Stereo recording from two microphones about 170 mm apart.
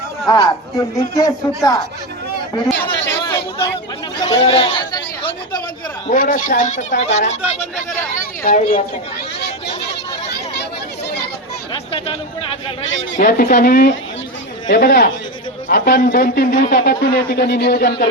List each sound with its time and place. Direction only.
0.3 s speech: 25° left (ahead or behind)
4.3 s a man's voice: 30° left (ahead or behind)
6.1 s speech: 50° left (ahead or behind)
11.7 s chatter: 35° left (ahead or behind)
13.1 s a man's voice: 60° left (ahead or behind)
14.7 s a man's voice: 75° left (ahead or behind)
15.7 s a man's voice: 55° left (ahead or behind)
16.8 s a man's voice: 75° left (ahead or behind)